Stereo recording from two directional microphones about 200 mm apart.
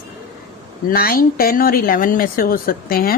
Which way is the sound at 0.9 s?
50° left (ahead or behind).